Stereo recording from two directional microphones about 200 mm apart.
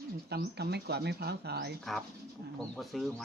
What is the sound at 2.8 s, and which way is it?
Speech, centre (ahead or behind).